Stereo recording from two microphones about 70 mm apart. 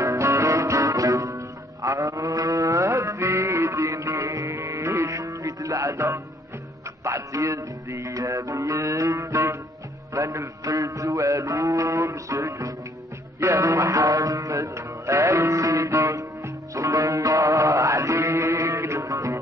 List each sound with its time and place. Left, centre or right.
0.0 s music: right